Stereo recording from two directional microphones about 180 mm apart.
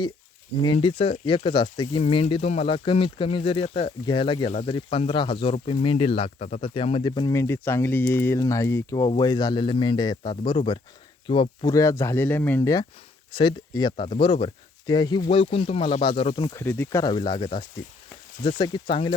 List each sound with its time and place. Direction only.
0.6 s speech: 30° left (ahead or behind)
16.6 s speech: 10° left (ahead or behind)
18.6 s speech: 25° left (ahead or behind)